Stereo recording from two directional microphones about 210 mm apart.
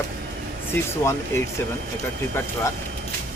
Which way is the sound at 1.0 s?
15° left (ahead or behind).